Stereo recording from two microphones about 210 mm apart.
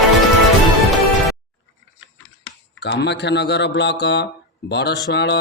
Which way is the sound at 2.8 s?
55° left (ahead or behind).